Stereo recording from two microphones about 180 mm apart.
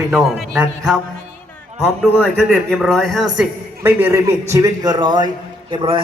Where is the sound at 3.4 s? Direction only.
10° right (ahead or behind).